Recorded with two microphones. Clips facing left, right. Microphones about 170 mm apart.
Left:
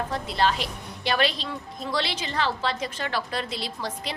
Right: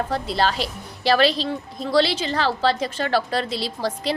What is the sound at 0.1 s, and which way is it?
A woman's voice, 35° right (ahead or behind).